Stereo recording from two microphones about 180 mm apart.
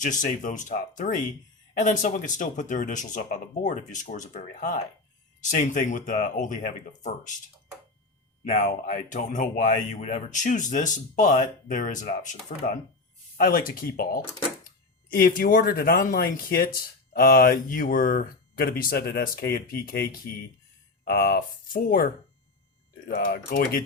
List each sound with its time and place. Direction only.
0.0 s speech: 45° left (ahead or behind)
8.6 s speech: 50° left (ahead or behind)